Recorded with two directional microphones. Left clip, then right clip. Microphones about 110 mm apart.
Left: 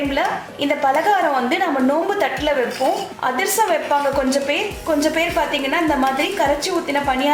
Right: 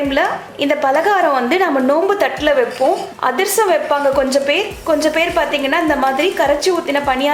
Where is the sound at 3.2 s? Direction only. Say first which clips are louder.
Right 3 dB; 35° right (ahead or behind).